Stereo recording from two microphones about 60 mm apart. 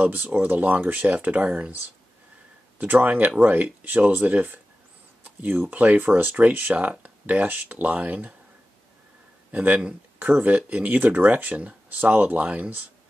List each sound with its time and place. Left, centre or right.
0.0 s speech: right
2.8 s speech: right
9.5 s speech: right